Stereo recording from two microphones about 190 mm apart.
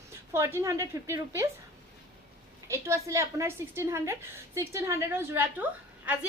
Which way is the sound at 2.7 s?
15° right (ahead or behind).